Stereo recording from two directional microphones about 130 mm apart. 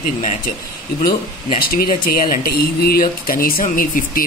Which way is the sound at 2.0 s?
90° left.